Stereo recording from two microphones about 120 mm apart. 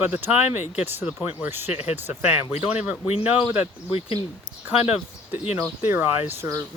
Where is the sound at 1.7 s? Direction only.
60° left (ahead or behind).